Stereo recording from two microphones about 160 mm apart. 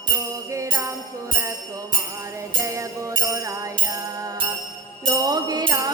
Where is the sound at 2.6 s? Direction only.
20° right (ahead or behind).